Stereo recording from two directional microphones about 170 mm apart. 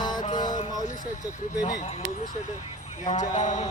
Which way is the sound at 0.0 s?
25° left (ahead or behind).